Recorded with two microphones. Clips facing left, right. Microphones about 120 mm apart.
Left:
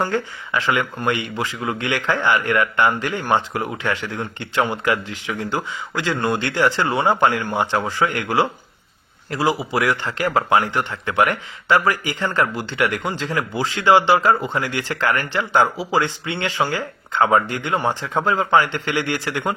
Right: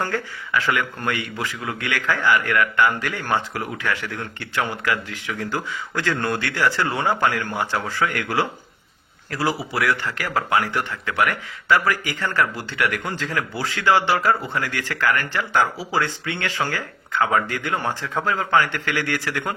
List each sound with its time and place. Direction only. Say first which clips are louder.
0.0 s a man's voice: left 4 dB; 20° left (ahead or behind)